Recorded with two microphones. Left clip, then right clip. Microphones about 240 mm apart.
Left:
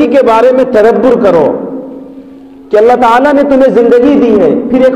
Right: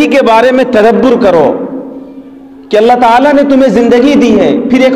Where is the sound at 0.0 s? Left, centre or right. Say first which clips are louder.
Even; right.